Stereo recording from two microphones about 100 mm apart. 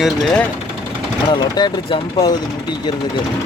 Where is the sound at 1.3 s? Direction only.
45° left (ahead or behind).